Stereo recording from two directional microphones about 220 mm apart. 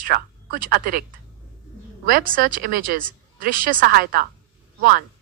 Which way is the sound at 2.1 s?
40° right (ahead or behind).